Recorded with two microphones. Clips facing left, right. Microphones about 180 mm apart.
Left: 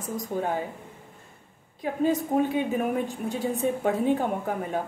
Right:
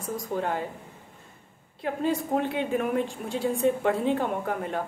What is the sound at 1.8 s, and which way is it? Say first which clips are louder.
A woman's voice: left 2 dB; 10° left (ahead or behind).